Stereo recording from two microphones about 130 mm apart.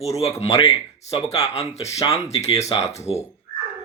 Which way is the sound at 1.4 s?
55° left (ahead or behind).